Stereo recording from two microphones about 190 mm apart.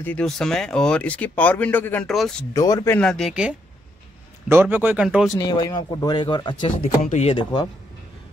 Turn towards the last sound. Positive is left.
turn(degrees=25)  # may be behind; listen again after turning